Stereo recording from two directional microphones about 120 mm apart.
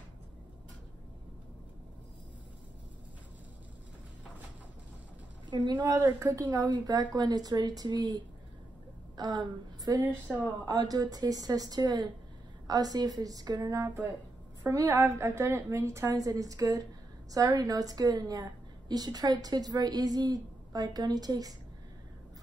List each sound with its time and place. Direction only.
5.5 s a woman's voice: 35° right (ahead or behind)
6.0 s a woman's voice: 25° right (ahead or behind)
6.4 s a woman's voice: 40° right (ahead or behind)